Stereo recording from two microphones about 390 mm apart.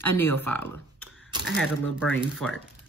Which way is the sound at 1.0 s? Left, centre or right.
Left.